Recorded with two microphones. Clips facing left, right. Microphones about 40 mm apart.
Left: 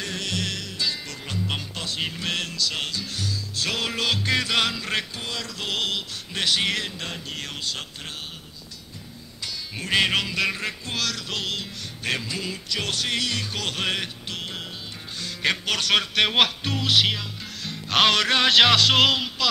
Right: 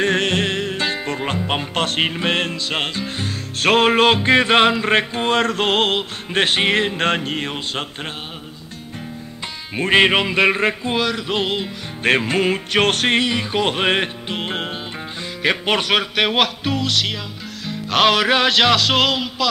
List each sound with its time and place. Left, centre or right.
0.0 s music: right
7.0 s music: right
7.3 s music: right
9.8 s music: right
12.0 s music: right
13.2 s music: right
15.6 s speech: right
15.9 s music: centre
17.6 s music: centre